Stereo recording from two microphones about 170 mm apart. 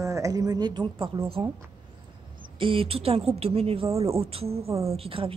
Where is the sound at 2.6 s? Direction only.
35° right (ahead or behind).